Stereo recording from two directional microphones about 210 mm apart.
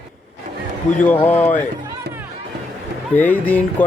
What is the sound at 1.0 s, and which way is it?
Speech, 10° left (ahead or behind).